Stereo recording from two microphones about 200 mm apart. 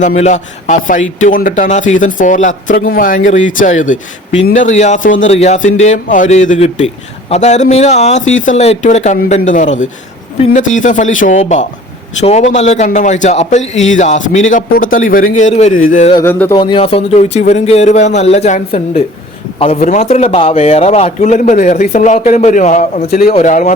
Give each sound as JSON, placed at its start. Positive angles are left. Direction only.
{"t": 0.0, "sound": "a man's voice", "side_deg": 35}
{"t": 16.1, "sound": "music", "side_deg": 10}
{"t": 16.6, "sound": "a man's voice", "side_deg": 25}